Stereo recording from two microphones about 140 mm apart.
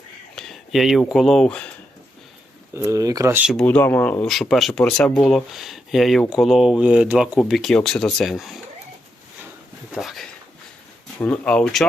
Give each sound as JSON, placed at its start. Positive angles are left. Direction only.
{"t": 0.3, "sound": "speech", "side_deg": 0}
{"t": 2.7, "sound": "speech", "side_deg": -20}
{"t": 3.5, "sound": "speech", "side_deg": 5}
{"t": 9.9, "sound": "a sound", "side_deg": 0}
{"t": 11.2, "sound": "speech", "side_deg": 10}